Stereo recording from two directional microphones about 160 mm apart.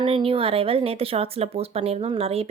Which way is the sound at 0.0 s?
35° right (ahead or behind).